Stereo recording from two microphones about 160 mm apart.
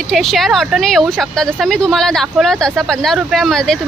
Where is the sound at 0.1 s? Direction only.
Centre (ahead or behind).